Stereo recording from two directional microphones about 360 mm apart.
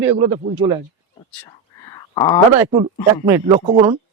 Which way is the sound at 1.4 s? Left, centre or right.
Centre.